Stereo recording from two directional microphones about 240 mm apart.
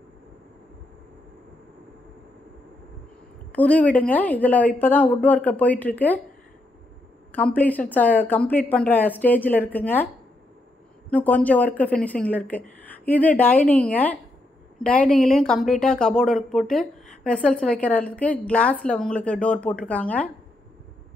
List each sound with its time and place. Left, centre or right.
3.5 s speech: centre
7.3 s speech: centre
11.1 s speech: centre